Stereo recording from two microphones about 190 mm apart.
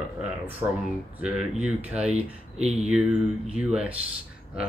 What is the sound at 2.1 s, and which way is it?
Speech, 35° right (ahead or behind).